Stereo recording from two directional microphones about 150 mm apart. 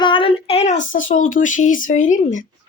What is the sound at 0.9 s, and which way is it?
Speech, 65° left (ahead or behind).